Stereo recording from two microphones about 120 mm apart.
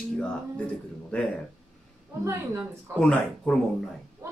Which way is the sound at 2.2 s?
20° right (ahead or behind).